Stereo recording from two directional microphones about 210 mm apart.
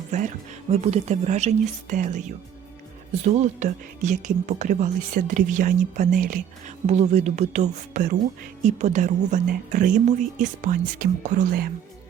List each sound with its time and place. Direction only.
0.1 s speech: 35° right (ahead or behind)
3.2 s speech: 35° right (ahead or behind)